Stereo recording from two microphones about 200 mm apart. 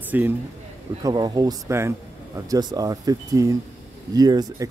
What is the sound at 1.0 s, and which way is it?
Speech, 20° right (ahead or behind).